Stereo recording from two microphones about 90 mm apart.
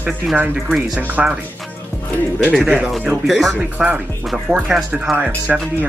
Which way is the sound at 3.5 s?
10° right (ahead or behind).